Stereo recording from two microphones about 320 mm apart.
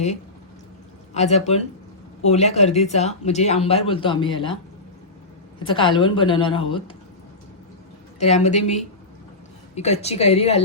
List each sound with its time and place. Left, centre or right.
1.1 s speech: centre
5.6 s speech: centre
8.2 s speech: centre